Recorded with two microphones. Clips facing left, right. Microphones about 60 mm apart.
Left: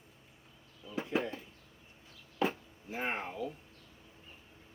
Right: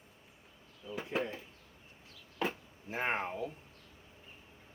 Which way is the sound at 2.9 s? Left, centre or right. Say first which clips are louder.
Right 2 dB; right.